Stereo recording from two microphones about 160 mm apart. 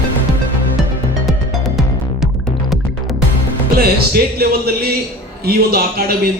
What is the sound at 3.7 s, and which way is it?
Speech, 75° right (ahead or behind).